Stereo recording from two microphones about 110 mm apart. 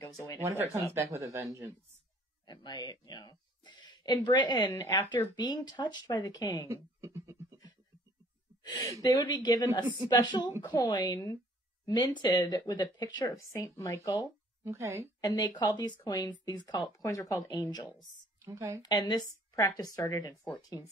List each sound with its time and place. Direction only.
0.0 s speech: 30° left (ahead or behind)
0.4 s speech: 25° right (ahead or behind)
2.4 s speech: 40° left (ahead or behind)
6.7 s a sound: 25° right (ahead or behind)
8.7 s speech: 35° left (ahead or behind)
14.6 s speech: 25° right (ahead or behind)
15.1 s speech: 35° left (ahead or behind)
18.4 s a woman's voice: 30° right (ahead or behind)
18.8 s speech: 40° left (ahead or behind)
19.2 s speech: 25° left (ahead or behind)